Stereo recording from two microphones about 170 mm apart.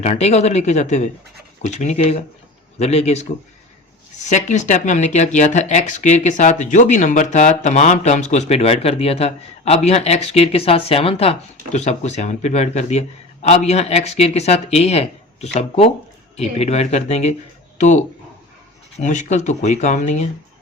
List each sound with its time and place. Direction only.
0.0 s speech: 40° left (ahead or behind)
4.3 s speech: 45° left (ahead or behind)